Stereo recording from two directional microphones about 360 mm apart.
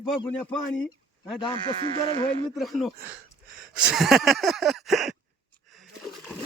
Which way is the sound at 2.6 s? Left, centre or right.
Centre.